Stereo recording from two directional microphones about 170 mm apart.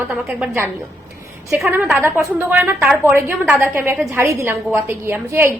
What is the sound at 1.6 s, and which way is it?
A woman's voice, 10° right (ahead or behind).